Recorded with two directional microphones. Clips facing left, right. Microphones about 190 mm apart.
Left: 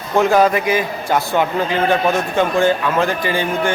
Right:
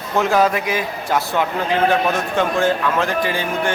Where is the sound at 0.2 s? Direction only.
Centre (ahead or behind).